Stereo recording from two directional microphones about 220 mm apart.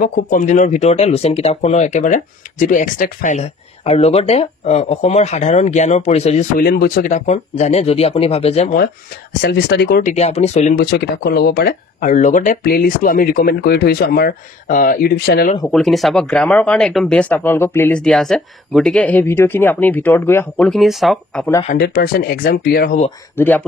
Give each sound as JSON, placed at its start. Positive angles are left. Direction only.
{"t": 0.0, "sound": "speech", "side_deg": 40}
{"t": 6.6, "sound": "speech", "side_deg": 45}
{"t": 9.4, "sound": "speech", "side_deg": 50}
{"t": 10.1, "sound": "speech", "side_deg": 30}
{"t": 10.9, "sound": "speech", "side_deg": 45}
{"t": 15.7, "sound": "speech", "side_deg": 0}
{"t": 21.6, "sound": "speech", "side_deg": 45}
{"t": 23.3, "sound": "speech", "side_deg": 10}